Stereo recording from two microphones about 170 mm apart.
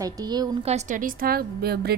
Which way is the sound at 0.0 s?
20° right (ahead or behind).